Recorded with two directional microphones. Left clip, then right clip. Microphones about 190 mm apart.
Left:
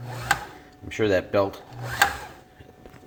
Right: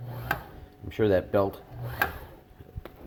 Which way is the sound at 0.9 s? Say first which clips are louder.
Left 2 dB; 15° right (ahead or behind).